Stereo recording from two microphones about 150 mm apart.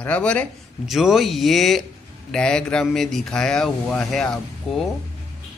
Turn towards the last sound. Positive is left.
turn(degrees=5)  # may be behind; listen again after turning